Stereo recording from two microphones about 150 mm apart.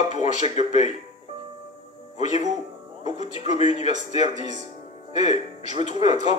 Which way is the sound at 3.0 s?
50° left (ahead or behind).